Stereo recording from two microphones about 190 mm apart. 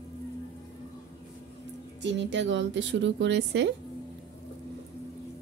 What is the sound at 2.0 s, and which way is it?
A woman's voice, 70° right (ahead or behind).